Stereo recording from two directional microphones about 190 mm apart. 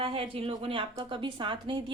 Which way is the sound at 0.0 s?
30° right (ahead or behind).